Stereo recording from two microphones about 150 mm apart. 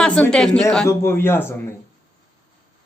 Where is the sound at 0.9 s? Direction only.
15° left (ahead or behind).